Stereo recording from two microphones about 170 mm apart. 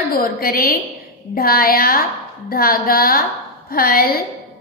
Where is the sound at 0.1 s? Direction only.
60° left (ahead or behind).